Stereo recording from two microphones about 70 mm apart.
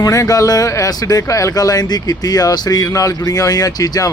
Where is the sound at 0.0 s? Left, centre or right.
Left.